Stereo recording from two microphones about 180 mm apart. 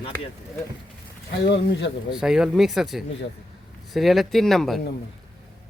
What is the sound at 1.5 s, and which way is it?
Speech, 75° left (ahead or behind).